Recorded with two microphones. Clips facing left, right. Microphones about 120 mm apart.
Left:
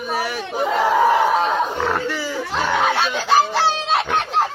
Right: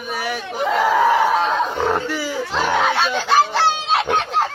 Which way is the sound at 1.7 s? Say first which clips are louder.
Right 1 dB; 10° right (ahead or behind).